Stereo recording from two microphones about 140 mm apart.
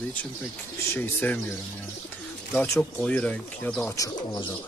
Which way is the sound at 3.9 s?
25° left (ahead or behind).